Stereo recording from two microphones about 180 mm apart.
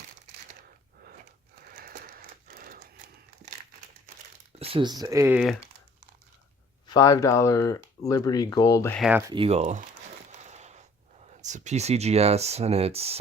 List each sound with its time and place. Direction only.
1.7 s a sound: 55° right (ahead or behind)
4.6 s speech: 30° right (ahead or behind)
6.8 s speech: 20° left (ahead or behind)
9.0 s speech: 5° right (ahead or behind)
9.2 s speech: 30° right (ahead or behind)
10.3 s a sound: 40° right (ahead or behind)
11.3 s speech: 40° right (ahead or behind)